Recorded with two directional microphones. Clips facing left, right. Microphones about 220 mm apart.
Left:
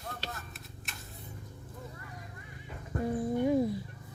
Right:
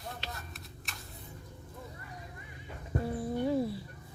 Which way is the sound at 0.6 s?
Centre (ahead or behind).